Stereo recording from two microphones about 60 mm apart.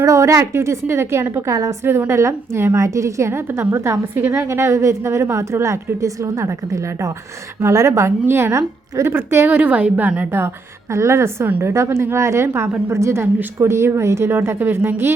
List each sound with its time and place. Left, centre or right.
0.0 s a woman's voice: right
1.8 s a woman's voice: right
10.9 s a woman's voice: right
14.3 s a woman's voice: right